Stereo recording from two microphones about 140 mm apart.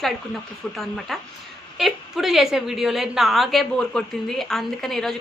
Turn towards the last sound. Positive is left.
turn(degrees=0)  # may be behind; listen again after turning